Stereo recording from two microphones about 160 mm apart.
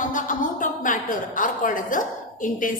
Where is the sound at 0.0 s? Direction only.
55° left (ahead or behind).